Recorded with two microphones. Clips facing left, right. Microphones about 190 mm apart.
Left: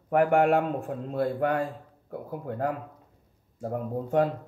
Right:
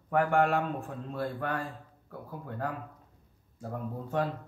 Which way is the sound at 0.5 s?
45° left (ahead or behind).